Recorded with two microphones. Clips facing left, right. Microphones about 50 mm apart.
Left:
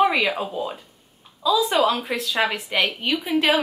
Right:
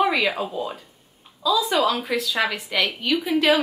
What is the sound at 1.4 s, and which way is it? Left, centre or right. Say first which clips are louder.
A woman's voice: left 1 dB; left.